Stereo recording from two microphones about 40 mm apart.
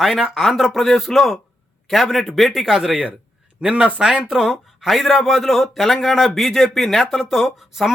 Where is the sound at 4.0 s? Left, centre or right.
Centre.